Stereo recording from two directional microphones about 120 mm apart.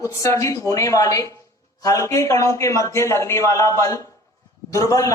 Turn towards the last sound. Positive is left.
turn(degrees=25)  # may be behind; listen again after turning